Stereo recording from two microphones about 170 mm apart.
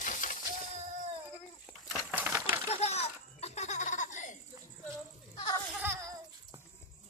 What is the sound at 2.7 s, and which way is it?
Laughter, 40° left (ahead or behind).